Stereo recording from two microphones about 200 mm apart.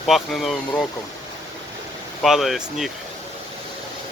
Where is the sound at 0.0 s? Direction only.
Centre (ahead or behind).